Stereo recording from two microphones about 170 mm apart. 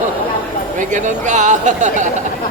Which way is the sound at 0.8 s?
45° right (ahead or behind).